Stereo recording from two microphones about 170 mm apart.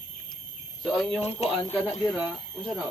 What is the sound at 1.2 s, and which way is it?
Speech, 40° left (ahead or behind).